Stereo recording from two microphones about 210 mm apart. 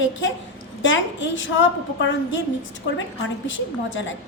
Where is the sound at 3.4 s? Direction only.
65° left (ahead or behind).